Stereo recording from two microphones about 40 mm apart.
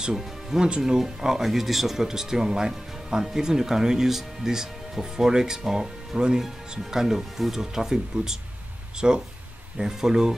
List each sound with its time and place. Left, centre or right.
0.1 s speech: centre
0.7 s speech: centre
9.0 s speech: right